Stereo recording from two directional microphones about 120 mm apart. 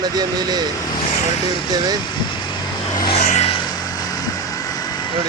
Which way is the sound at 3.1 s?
75° left (ahead or behind).